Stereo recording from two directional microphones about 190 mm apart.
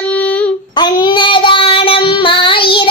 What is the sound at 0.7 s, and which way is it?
Child singing, 20° left (ahead or behind).